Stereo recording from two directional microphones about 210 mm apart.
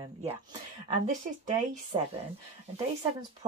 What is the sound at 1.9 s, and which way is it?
Speech, 25° right (ahead or behind).